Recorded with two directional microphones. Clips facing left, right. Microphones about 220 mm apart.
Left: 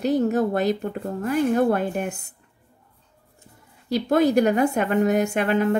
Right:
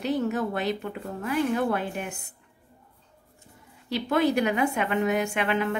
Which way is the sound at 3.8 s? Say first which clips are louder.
Left 5 dB; 40° left (ahead or behind).